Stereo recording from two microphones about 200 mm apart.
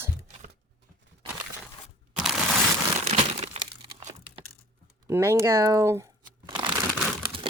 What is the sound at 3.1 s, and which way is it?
Crumpling, 30° right (ahead or behind).